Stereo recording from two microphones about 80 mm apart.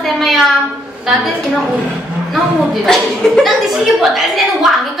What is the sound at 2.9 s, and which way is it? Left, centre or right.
A woman's voice, centre.